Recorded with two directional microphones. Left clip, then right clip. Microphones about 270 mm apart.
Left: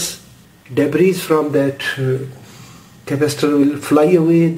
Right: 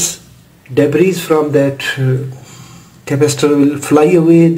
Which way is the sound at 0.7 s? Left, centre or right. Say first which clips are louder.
Right 3 dB; centre.